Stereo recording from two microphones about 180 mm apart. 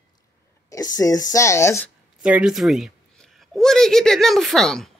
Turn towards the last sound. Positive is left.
turn(degrees=0)  # may be behind; listen again after turning